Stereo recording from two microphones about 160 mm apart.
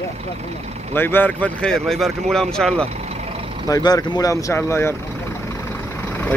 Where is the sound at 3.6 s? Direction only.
20° left (ahead or behind).